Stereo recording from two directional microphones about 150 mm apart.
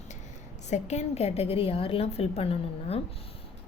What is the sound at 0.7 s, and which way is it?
A woman's voice, 50° left (ahead or behind).